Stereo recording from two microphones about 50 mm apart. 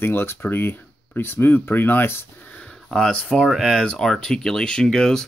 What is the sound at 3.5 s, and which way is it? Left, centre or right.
Speech, centre.